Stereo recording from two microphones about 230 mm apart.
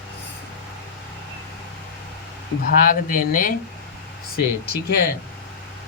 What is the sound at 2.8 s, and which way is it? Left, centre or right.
Speech, left.